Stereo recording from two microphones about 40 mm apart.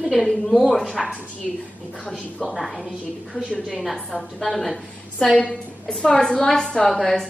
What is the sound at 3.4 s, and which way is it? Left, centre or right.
Speech, centre.